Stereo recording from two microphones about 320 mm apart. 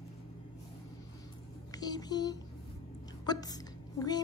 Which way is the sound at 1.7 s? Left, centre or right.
Centre.